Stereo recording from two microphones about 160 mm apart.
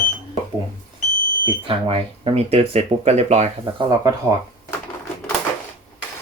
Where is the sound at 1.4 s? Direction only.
35° right (ahead or behind).